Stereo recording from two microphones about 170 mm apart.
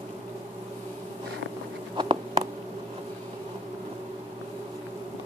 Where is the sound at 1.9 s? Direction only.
25° right (ahead or behind).